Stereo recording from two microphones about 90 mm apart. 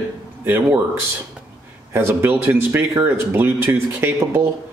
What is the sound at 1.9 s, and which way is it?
Speech, 25° right (ahead or behind).